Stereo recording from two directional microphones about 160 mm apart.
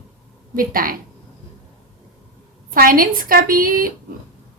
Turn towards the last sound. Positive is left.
turn(degrees=-60)  # may be behind; listen again after turning